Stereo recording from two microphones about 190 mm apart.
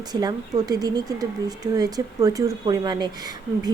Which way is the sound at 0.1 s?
20° right (ahead or behind).